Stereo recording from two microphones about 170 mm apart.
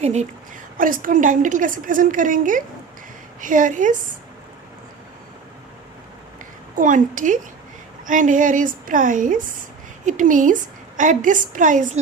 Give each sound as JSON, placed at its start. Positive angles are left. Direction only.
{"t": 0.0, "sound": "a woman's voice", "side_deg": -40}
{"t": 0.8, "sound": "a woman's voice", "side_deg": -55}
{"t": 6.7, "sound": "a woman's voice", "side_deg": -50}